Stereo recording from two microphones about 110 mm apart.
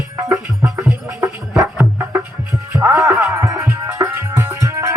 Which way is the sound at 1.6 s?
20° right (ahead or behind).